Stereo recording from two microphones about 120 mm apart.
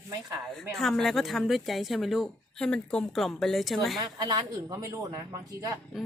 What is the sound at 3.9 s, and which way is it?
Speech, 35° right (ahead or behind).